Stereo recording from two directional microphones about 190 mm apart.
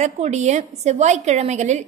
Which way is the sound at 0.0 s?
35° right (ahead or behind).